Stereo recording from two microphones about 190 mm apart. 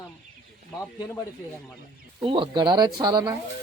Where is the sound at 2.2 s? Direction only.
25° right (ahead or behind).